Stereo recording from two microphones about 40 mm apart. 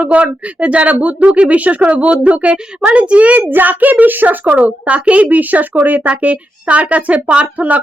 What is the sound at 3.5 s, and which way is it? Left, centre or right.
A child's voice, right.